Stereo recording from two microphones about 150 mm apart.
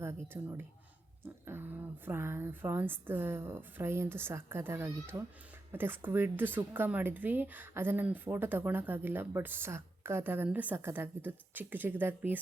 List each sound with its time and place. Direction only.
0.0 s speech: 15° right (ahead or behind)